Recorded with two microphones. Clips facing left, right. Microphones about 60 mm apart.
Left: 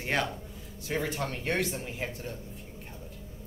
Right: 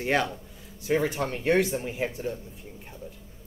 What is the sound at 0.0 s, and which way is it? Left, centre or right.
Speech, centre.